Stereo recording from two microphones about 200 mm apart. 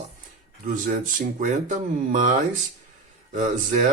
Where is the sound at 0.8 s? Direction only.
40° right (ahead or behind).